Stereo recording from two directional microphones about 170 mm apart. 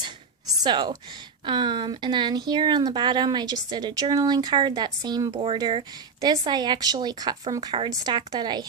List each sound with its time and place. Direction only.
0.6 s a woman's voice: 25° right (ahead or behind)